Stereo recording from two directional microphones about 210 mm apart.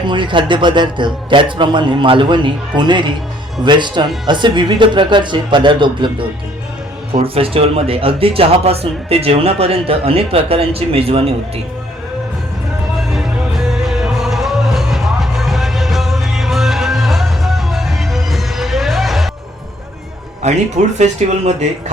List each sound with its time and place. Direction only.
0.1 s speech: 20° right (ahead or behind)
13.1 s music: centre (ahead or behind)
20.4 s speech: 30° right (ahead or behind)